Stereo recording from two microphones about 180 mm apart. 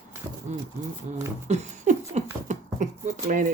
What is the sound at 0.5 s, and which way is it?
Speech, 40° right (ahead or behind).